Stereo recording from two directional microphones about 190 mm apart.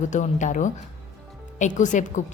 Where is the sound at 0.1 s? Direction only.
40° left (ahead or behind).